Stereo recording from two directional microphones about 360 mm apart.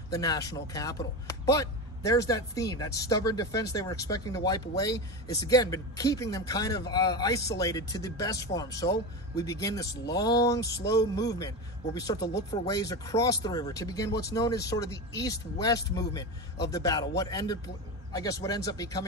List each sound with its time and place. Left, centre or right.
0.1 s speech: centre
12.2 s speech: left
12.6 s speech: centre